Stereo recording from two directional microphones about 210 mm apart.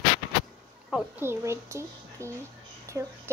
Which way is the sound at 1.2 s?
10° right (ahead or behind).